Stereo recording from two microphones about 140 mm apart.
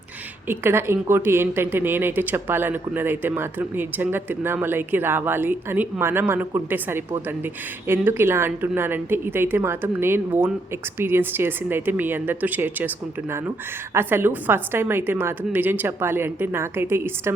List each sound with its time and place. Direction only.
0.4 s a woman's voice: 15° right (ahead or behind)
13.9 s a woman's voice: 15° right (ahead or behind)